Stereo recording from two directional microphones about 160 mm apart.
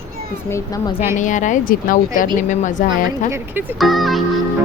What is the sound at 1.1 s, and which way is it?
Speech, 50° left (ahead or behind).